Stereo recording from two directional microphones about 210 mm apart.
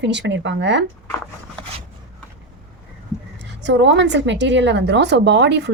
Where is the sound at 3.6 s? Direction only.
60° right (ahead or behind).